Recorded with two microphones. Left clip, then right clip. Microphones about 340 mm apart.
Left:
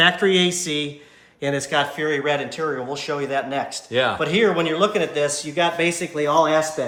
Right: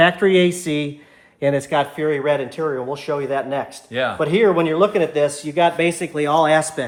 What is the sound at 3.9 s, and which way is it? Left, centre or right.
Speech, centre.